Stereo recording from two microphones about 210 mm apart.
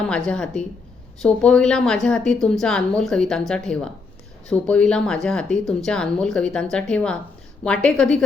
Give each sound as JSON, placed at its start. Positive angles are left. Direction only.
{"t": 0.1, "sound": "speech", "side_deg": 5}